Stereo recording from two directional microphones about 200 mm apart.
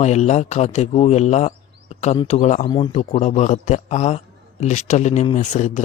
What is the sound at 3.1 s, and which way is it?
A man's voice, 35° left (ahead or behind).